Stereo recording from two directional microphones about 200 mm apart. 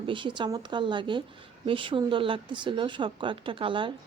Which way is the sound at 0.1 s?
25° right (ahead or behind).